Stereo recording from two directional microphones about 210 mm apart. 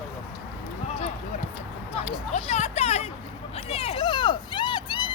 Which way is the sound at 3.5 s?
30° left (ahead or behind).